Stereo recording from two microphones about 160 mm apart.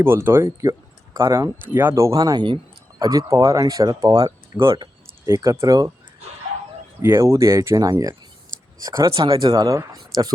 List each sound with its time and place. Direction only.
0.0 s speech: 15° right (ahead or behind)
7.0 s speech: 15° right (ahead or behind)